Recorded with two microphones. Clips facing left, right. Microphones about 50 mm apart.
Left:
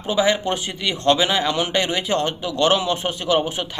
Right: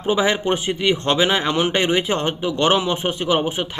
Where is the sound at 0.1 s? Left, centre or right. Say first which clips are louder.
Right 1 dB; right.